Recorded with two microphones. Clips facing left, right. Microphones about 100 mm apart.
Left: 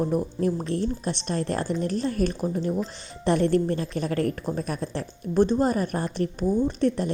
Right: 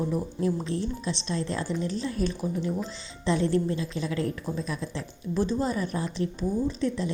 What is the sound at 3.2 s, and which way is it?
A woman's voice, 55° left (ahead or behind).